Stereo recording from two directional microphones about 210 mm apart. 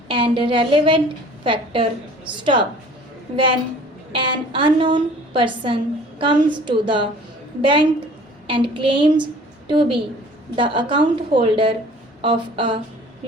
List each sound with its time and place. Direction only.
0.1 s a woman's voice: 25° right (ahead or behind)
4.1 s a woman's voice: 25° right (ahead or behind)